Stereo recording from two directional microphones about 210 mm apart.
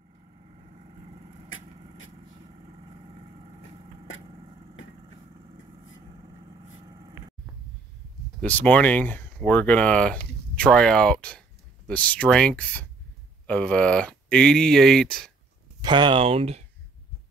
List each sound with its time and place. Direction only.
3.1 s vehicle: 25° right (ahead or behind)
6.0 s vehicle: 25° right (ahead or behind)
8.4 s speech: 5° left (ahead or behind)
15.8 s speech: 20° right (ahead or behind)